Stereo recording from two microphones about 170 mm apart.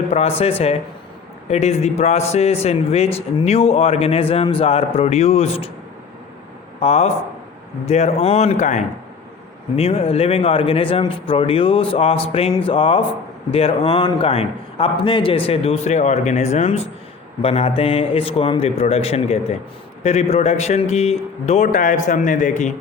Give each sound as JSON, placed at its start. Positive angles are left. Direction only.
{"t": 0.1, "sound": "speech", "side_deg": 35}
{"t": 6.7, "sound": "speech", "side_deg": 40}